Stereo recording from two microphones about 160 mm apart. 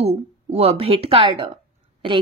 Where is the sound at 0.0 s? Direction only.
40° right (ahead or behind).